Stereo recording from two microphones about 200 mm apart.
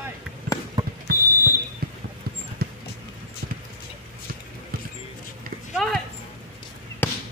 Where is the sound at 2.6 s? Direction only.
50° right (ahead or behind).